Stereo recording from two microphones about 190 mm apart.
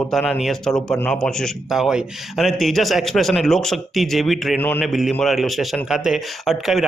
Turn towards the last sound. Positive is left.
turn(degrees=0)  # may be behind; listen again after turning